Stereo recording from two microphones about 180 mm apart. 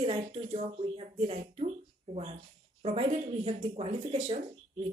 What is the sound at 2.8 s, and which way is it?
Speech, 30° right (ahead or behind).